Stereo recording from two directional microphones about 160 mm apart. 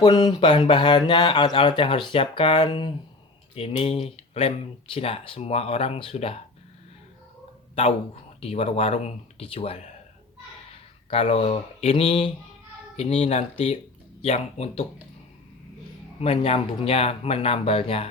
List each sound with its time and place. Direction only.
0.0 s speech: 25° left (ahead or behind)
8.4 s speech: 40° left (ahead or behind)
11.1 s speech: 35° left (ahead or behind)
16.2 s speech: 35° left (ahead or behind)